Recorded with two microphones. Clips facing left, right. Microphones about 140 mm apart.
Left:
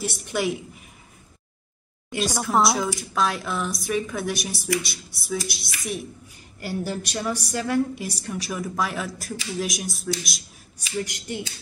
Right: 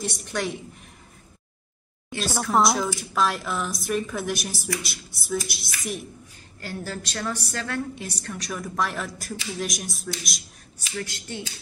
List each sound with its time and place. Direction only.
0.0 s a woman's voice: 5° left (ahead or behind)
2.1 s a woman's voice: 5° right (ahead or behind)
6.6 s a woman's voice: 15° left (ahead or behind)
11.0 s a woman's voice: 15° left (ahead or behind)